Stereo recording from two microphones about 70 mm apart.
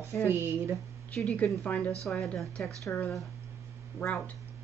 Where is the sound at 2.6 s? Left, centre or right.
Left.